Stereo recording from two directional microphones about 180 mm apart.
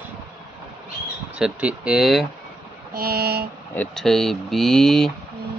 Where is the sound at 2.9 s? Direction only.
55° right (ahead or behind).